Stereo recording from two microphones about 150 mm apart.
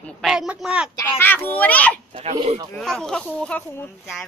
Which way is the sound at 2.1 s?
40° right (ahead or behind).